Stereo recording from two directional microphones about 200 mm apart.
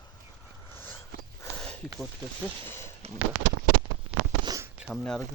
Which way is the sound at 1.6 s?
Centre (ahead or behind).